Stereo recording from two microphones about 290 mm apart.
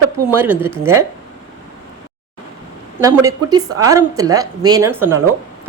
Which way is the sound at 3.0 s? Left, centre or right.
Centre.